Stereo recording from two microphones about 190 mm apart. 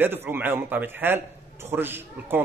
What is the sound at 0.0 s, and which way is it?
A man's voice, 10° right (ahead or behind).